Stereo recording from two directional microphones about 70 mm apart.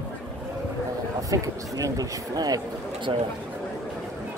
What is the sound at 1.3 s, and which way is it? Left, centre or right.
Speech, right.